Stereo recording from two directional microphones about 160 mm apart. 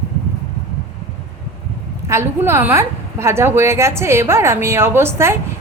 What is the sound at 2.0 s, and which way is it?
A woman's voice, 15° right (ahead or behind).